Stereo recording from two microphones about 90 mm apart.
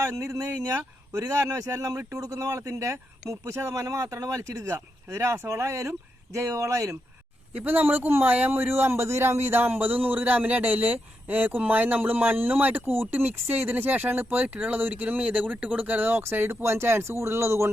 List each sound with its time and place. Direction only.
0.0 s speech: 30° right (ahead or behind)
7.5 s a man's voice: 20° right (ahead or behind)